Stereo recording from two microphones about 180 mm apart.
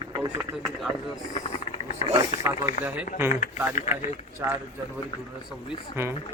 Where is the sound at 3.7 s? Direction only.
40° left (ahead or behind).